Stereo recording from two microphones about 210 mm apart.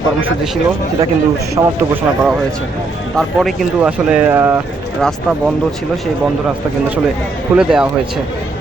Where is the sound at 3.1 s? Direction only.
5° right (ahead or behind).